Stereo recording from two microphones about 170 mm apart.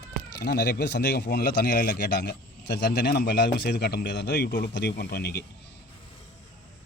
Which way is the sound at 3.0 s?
80° left.